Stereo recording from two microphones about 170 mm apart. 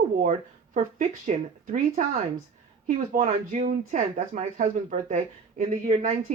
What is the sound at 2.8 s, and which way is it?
Speech, 45° right (ahead or behind).